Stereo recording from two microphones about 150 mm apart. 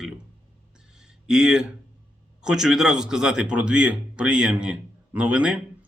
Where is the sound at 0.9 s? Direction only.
5° right (ahead or behind).